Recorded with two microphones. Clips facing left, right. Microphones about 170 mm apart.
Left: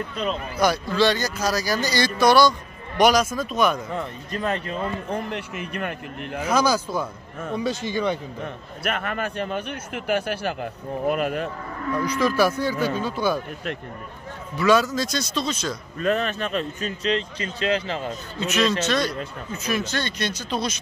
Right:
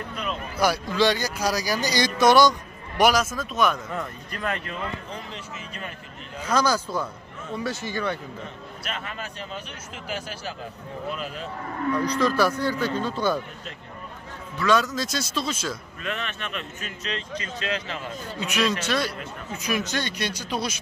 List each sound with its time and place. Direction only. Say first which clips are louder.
0.6 s speech: left 1 dB; 10° right (ahead or behind)
3.0 s a man's voice: left 2 dB; 5° right (ahead or behind)
3.7 s speech: left 3 dB; 20° left (ahead or behind)
4.4 s speech: left 4 dB; 35° left (ahead or behind)
5.1 s speech: left 8 dB; 60° left (ahead or behind)
6.5 s speech: left 2 dB; 10° left (ahead or behind)
8.8 s speech: left 8 dB; 60° left (ahead or behind)
12.2 s speech: left 4 dB; 10° left (ahead or behind)
14.6 s a man's voice: left 3 dB; 5° left (ahead or behind)
16.0 s speech: left 12 dB; 40° left (ahead or behind)
18.4 s speech: left 3 dB; 10° right (ahead or behind)